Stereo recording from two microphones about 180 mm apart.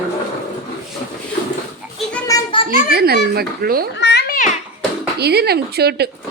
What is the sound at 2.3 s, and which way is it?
Children playing, 20° left (ahead or behind).